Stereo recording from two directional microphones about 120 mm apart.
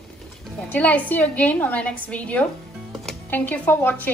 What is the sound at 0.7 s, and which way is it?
A woman's voice, 15° left (ahead or behind).